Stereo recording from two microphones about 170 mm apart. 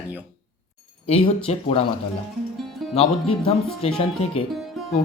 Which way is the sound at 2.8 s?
Centre (ahead or behind).